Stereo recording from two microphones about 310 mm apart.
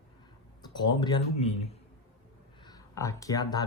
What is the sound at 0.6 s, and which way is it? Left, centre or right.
A man's voice, centre.